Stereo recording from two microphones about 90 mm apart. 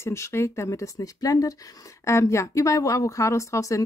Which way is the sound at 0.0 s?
30° left (ahead or behind).